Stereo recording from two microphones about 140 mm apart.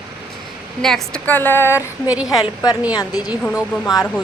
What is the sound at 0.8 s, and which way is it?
A woman's voice, 5° left (ahead or behind).